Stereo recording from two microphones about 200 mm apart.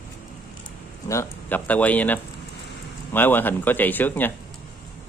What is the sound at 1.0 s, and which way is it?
A man's voice, 15° left (ahead or behind).